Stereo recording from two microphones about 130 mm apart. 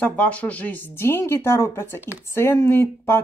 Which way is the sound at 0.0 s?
10° left (ahead or behind).